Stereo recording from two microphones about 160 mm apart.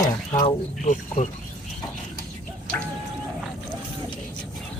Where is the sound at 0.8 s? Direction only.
50° left (ahead or behind).